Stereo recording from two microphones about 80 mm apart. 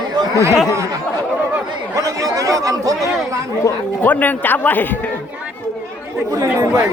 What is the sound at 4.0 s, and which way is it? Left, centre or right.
Speech, left.